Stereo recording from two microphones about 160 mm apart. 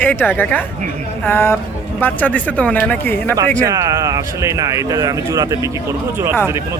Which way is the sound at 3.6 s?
20° right (ahead or behind).